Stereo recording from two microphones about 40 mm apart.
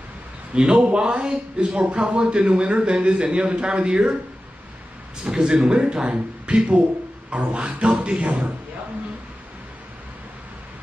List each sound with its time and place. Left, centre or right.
0.6 s a man's voice: centre
0.8 s a man's voice: right
5.2 s a man's voice: centre
7.2 s a sound: right